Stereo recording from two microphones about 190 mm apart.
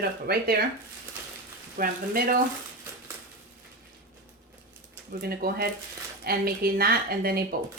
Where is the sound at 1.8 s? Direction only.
50° right (ahead or behind).